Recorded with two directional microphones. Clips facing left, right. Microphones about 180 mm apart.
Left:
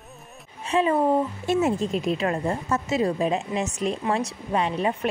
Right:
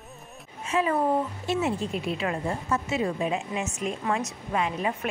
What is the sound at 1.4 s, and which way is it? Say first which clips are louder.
A woman's voice: left 4 dB; 40° left (ahead or behind).